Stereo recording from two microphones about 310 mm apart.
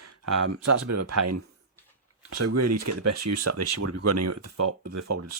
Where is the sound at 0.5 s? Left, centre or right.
Right.